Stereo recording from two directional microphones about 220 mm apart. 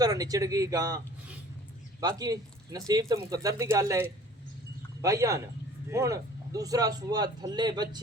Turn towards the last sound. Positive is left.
turn(degrees=-20)  # may be behind; listen again after turning